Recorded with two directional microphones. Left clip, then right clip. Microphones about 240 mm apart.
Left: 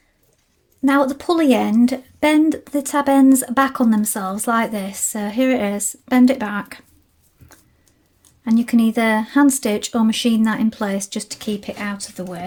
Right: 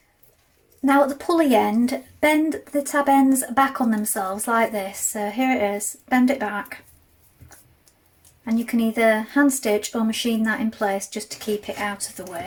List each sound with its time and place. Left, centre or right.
0.9 s speech: left
8.4 s speech: left